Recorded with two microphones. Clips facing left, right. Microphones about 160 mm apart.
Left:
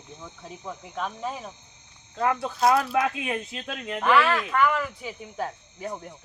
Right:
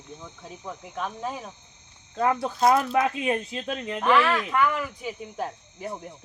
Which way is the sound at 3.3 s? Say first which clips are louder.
Right 4 dB; 35° right (ahead or behind).